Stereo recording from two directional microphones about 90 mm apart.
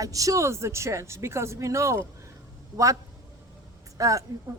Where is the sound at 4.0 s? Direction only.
40° right (ahead or behind).